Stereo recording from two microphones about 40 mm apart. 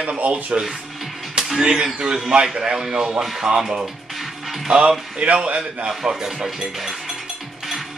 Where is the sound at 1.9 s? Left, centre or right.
Centre.